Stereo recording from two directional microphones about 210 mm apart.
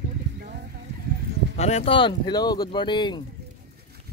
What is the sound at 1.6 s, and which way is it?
Speech, 30° left (ahead or behind).